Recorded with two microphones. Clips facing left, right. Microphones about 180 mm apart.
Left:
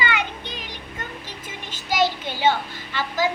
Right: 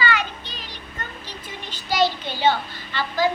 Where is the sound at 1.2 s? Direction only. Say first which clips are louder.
Even; 50° left (ahead or behind).